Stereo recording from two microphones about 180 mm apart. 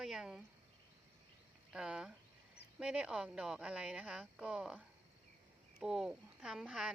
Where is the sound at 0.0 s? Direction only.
5° right (ahead or behind).